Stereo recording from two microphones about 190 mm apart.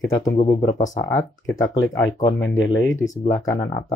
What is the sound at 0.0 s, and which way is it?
Speech, 15° left (ahead or behind).